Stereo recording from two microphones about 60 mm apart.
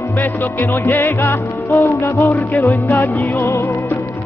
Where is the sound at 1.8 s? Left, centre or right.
Left.